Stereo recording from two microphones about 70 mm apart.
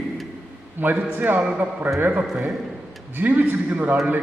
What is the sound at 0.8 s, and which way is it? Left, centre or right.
A man's voice, right.